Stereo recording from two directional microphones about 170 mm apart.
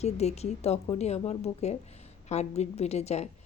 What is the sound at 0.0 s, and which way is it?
Speech, 40° left (ahead or behind).